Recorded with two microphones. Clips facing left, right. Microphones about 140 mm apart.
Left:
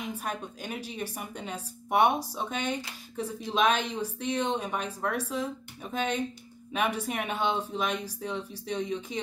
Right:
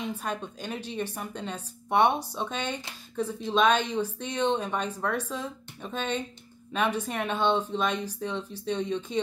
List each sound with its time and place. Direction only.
0.0 s a woman's voice: 10° left (ahead or behind)